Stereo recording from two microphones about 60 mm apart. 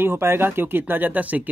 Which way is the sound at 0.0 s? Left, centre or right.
Right.